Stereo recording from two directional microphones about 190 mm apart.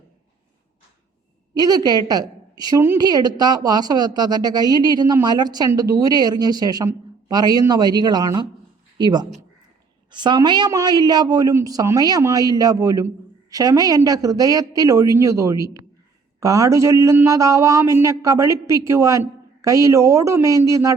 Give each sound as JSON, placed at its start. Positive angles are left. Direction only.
{"t": 1.5, "sound": "a woman's voice", "side_deg": -20}